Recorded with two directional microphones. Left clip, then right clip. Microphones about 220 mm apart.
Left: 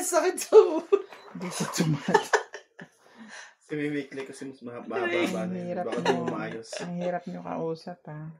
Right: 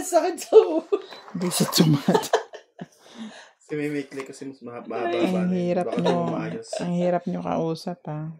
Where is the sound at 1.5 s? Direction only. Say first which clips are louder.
Right 8 dB; 50° right (ahead or behind).